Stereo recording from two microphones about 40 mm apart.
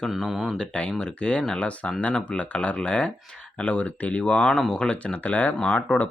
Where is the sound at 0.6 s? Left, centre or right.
Left.